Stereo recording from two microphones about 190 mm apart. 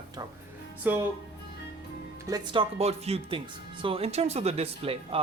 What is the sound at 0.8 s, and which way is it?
Speech, 10° right (ahead or behind).